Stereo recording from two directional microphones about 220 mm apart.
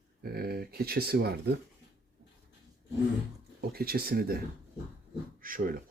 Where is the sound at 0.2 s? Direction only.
45° right (ahead or behind).